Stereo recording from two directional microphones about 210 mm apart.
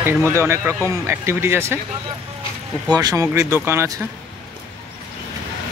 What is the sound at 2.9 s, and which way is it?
Speech, 20° right (ahead or behind).